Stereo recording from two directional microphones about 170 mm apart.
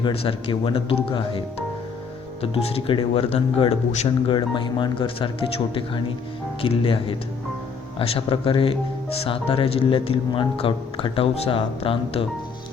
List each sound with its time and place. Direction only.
0.0 s speech: 30° left (ahead or behind)